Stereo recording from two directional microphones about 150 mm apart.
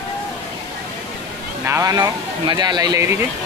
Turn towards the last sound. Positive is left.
turn(degrees=-25)  # may be behind; listen again after turning